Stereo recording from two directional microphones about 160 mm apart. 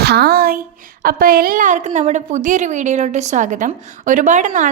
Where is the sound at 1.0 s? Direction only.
65° right (ahead or behind).